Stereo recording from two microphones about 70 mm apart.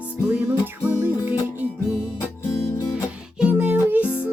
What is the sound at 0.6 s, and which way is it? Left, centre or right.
Music, right.